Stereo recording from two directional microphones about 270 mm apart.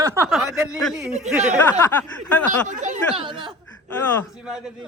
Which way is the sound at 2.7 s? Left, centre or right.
Right.